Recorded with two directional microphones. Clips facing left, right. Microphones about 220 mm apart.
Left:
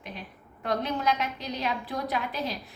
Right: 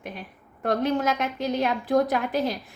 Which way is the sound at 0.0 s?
50° right (ahead or behind).